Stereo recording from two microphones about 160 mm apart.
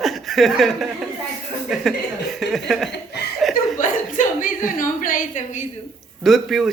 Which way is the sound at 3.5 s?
55° left (ahead or behind).